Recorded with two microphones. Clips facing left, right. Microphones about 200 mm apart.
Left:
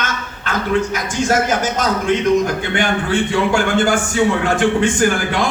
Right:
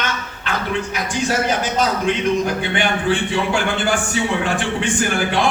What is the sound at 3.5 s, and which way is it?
Speech, 45° left (ahead or behind).